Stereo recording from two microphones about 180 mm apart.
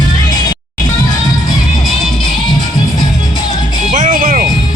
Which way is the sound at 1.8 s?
Centre (ahead or behind).